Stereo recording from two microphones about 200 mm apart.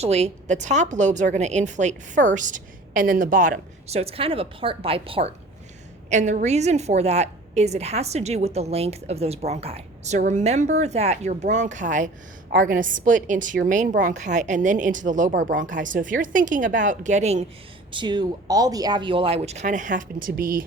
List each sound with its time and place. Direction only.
0.0 s a woman's voice: 30° right (ahead or behind)
17.9 s speech: 20° right (ahead or behind); by 20.7 s 45° right (ahead or behind)